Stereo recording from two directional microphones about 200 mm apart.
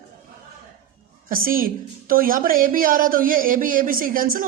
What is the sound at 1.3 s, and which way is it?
A woman's voice, 45° right (ahead or behind).